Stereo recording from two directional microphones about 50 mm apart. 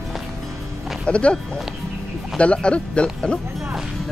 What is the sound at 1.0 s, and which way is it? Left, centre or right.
Speech, left.